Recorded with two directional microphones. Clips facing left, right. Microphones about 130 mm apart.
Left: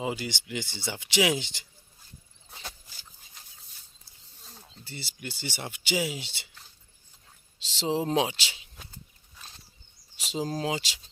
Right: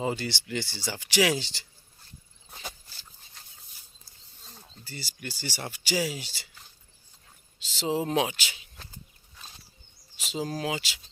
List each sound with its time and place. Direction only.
0.0 s speech: 10° left (ahead or behind)
2.5 s a sound: centre (ahead or behind)
4.4 s a sound: centre (ahead or behind)
4.8 s speech: 25° left (ahead or behind)
7.6 s speech: 30° left (ahead or behind)
10.2 s speech: 30° left (ahead or behind)